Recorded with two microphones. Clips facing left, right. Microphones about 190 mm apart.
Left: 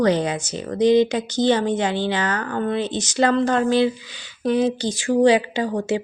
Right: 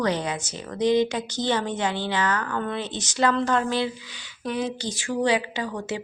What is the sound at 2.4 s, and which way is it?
Speech, 30° left (ahead or behind).